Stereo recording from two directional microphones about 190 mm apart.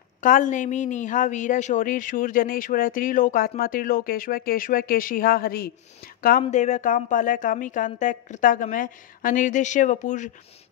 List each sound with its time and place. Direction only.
0.2 s speech: 45° left (ahead or behind)
6.4 s speech: 35° left (ahead or behind)